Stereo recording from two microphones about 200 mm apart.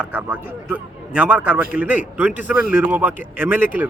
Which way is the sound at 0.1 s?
10° right (ahead or behind).